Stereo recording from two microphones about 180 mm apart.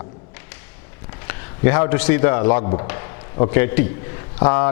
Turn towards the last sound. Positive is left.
turn(degrees=15)  # may be behind; listen again after turning